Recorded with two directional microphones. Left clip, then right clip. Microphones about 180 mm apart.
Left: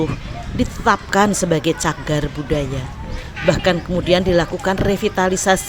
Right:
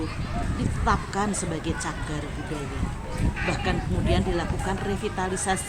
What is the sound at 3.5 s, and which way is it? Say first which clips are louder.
Speech: left 14 dB; 45° left (ahead or behind).